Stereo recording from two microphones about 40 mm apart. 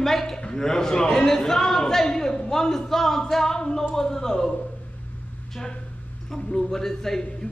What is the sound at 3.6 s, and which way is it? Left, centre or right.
Music, centre.